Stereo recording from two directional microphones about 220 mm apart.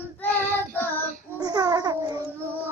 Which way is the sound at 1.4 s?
20° right (ahead or behind).